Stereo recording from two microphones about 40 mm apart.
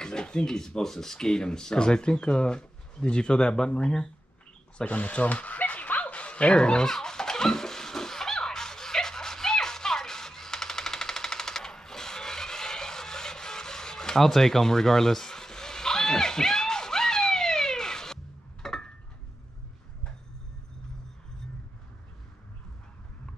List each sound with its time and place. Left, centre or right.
0.0 s speech: centre
4.8 s speech: left
6.9 s a sound: centre